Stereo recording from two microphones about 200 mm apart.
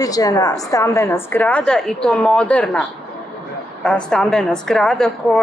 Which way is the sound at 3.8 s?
5° left (ahead or behind).